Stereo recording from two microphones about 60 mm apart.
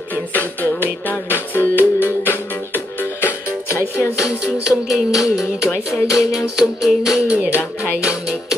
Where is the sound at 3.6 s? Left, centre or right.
Left.